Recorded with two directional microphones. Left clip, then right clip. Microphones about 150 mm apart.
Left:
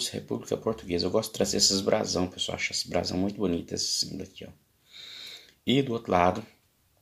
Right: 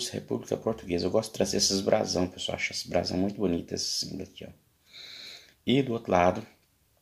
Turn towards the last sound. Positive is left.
turn(degrees=0)  # may be behind; listen again after turning